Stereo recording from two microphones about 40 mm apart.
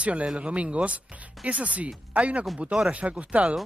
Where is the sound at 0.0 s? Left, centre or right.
Right.